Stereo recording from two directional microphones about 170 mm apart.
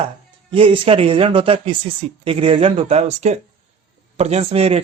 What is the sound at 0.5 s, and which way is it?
Speech, 30° right (ahead or behind).